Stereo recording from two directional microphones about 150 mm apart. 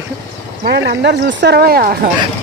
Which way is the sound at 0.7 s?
90° right.